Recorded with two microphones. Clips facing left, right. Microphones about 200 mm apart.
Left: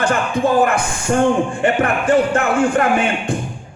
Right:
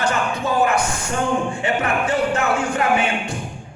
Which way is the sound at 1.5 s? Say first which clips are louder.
Left 4 dB; 50° left (ahead or behind).